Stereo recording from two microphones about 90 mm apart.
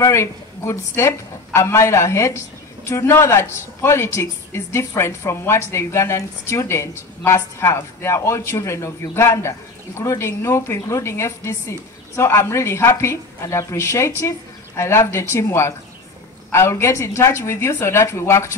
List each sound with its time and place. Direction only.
0.0 s a woman's voice: 30° left (ahead or behind)